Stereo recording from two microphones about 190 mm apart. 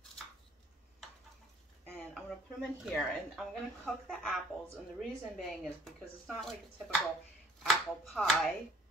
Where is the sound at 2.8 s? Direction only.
Centre (ahead or behind).